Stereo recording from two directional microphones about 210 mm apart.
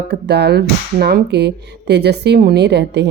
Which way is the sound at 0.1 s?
55° right (ahead or behind).